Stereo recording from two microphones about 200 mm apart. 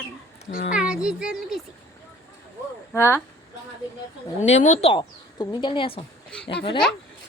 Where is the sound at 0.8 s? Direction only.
5° right (ahead or behind).